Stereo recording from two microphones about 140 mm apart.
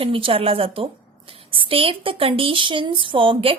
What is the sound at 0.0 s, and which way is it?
A woman's voice, 40° right (ahead or behind).